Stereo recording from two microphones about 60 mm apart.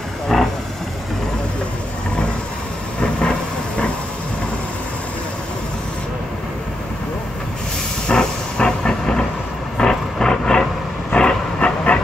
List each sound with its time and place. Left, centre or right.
0.3 s a sound: centre
3.0 s vehicle: centre
8.1 s vehicle: centre